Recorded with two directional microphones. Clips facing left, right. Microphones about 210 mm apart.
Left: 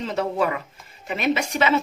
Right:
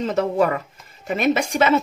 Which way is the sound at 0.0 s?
45° right (ahead or behind).